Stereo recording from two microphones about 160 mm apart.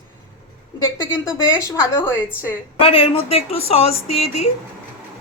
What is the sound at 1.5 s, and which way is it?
Speech, 20° left (ahead or behind).